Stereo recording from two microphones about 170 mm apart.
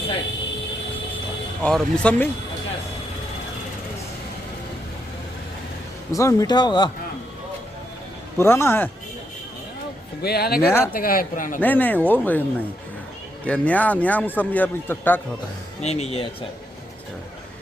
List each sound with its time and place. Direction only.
1.6 s a man's voice: 5° left (ahead or behind)
6.1 s speech: 20° left (ahead or behind)
8.4 s a man's voice: 15° left (ahead or behind)
10.2 s speech: 65° left (ahead or behind); by 11.6 s 50° left (ahead or behind)
11.6 s a man's voice: 10° left (ahead or behind)
15.8 s speech: 40° left (ahead or behind)